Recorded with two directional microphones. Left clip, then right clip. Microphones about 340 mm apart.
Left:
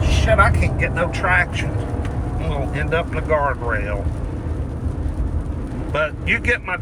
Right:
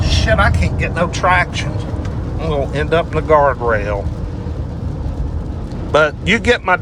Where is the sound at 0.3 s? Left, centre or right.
Centre.